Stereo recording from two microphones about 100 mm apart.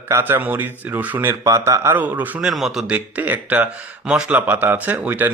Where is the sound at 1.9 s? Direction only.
15° right (ahead or behind).